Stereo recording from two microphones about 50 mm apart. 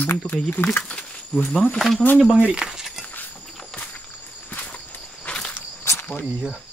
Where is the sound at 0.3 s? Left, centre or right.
Left.